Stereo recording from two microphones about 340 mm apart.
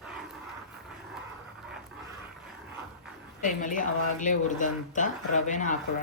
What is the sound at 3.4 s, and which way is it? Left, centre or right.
Speech, left.